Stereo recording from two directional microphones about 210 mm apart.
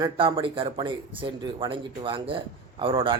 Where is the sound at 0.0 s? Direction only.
25° right (ahead or behind).